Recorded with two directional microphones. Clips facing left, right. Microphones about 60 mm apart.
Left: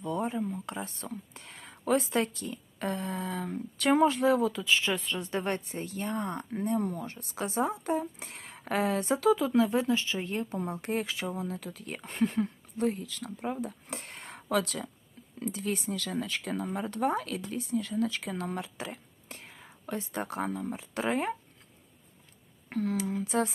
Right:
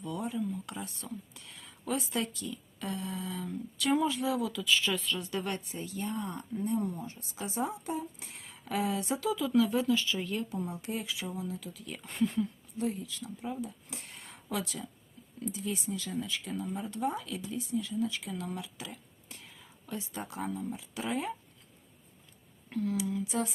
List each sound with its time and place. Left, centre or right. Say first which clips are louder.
0.0 s speech: left 3 dB; left
22.7 s speech: left 2 dB; left